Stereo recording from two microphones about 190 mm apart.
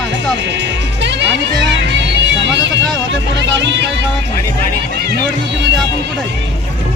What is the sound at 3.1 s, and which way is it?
Speech, 70° right (ahead or behind).